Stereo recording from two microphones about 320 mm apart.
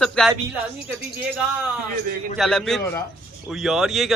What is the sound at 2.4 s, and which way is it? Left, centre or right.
A man's voice, centre.